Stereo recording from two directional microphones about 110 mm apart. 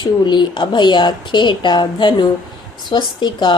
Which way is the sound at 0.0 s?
45° left (ahead or behind).